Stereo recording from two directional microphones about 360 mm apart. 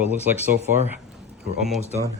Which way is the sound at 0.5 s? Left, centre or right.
Centre.